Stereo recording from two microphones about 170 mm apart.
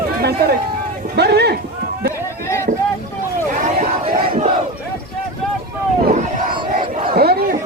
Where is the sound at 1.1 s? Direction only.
75° right (ahead or behind).